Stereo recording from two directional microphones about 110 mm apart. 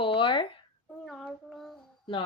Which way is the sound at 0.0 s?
50° left (ahead or behind).